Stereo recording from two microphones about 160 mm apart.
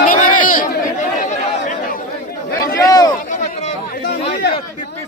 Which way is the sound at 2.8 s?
25° left (ahead or behind).